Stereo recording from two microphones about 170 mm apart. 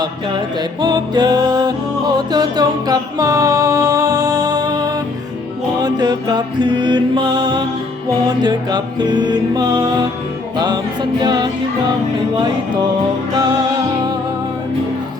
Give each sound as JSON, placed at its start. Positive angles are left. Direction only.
{"t": 0.8, "sound": "mantra", "side_deg": -25}
{"t": 2.1, "sound": "music", "side_deg": -25}
{"t": 5.8, "sound": "mantra", "side_deg": -25}
{"t": 11.2, "sound": "mantra", "side_deg": -25}
{"t": 13.3, "sound": "music", "side_deg": -25}